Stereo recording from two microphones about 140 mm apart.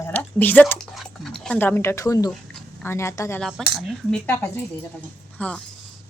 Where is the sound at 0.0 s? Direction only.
10° left (ahead or behind).